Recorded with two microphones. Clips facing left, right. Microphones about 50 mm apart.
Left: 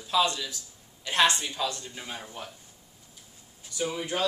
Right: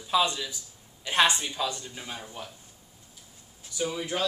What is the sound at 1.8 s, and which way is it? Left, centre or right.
Speech, centre.